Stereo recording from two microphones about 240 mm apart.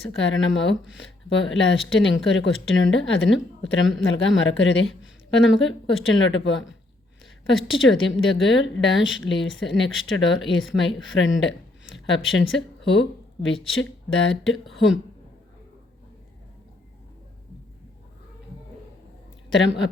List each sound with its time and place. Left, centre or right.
0.2 s speech: left
19.5 s speech: left